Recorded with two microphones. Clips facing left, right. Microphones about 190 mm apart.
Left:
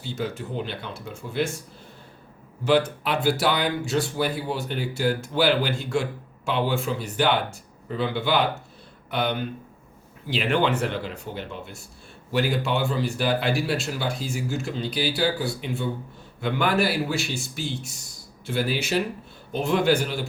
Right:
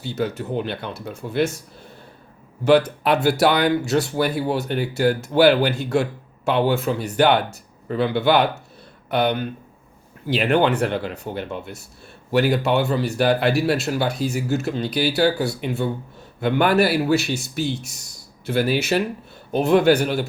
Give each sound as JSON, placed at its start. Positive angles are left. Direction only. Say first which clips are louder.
{"t": 0.0, "sound": "a man's voice", "louder": "right 5 dB", "side_deg": -65}
{"t": 0.9, "sound": "speech", "louder": "right 4 dB", "side_deg": -40}
{"t": 1.2, "sound": "a man's voice", "louder": "right 5 dB", "side_deg": -65}
{"t": 2.6, "sound": "a man's voice", "louder": "right 5 dB", "side_deg": -70}